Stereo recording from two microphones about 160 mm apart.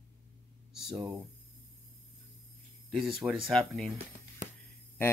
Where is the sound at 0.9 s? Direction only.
25° right (ahead or behind).